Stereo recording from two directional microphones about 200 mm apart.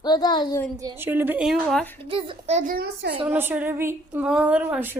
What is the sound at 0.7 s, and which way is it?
A woman's voice, 15° right (ahead or behind).